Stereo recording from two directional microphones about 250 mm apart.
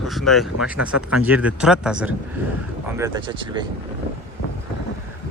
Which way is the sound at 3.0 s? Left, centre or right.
Centre.